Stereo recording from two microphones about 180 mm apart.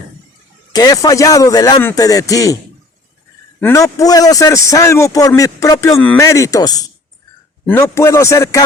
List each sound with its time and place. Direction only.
0.7 s a man's voice: 20° left (ahead or behind)
3.6 s a man's voice: 15° left (ahead or behind)